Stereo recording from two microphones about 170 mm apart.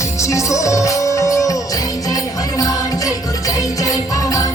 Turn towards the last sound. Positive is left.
turn(degrees=20)  # may be behind; listen again after turning